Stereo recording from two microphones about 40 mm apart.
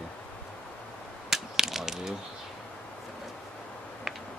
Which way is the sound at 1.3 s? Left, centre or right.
Centre.